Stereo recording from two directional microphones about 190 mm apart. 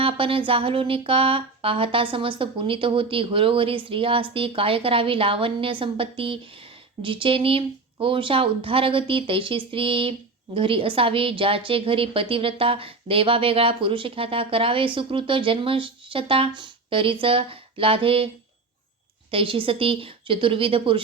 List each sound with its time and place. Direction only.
0.0 s speech: 30° right (ahead or behind)
19.3 s speech: 30° right (ahead or behind)